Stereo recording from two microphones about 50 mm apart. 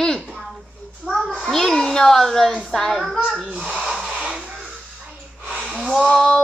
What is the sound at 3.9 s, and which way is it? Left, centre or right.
Music, centre.